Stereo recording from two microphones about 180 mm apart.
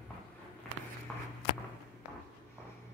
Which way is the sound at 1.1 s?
Centre (ahead or behind).